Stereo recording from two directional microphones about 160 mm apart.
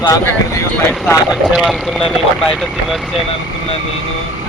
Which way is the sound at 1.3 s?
Centre (ahead or behind).